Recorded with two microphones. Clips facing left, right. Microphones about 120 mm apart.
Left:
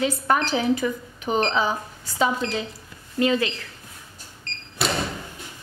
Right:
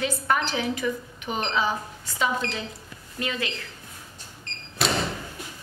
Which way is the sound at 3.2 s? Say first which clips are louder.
Left 9 dB; 30° left (ahead or behind).